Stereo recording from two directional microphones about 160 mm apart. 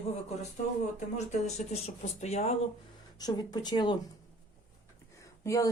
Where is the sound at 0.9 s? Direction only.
45° left (ahead or behind).